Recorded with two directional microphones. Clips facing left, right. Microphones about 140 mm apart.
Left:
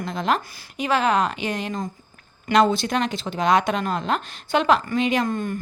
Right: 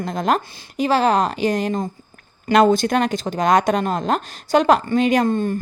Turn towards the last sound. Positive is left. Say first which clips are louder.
# right 6 dB
turn(degrees=-30)  # may be behind; listen again after turning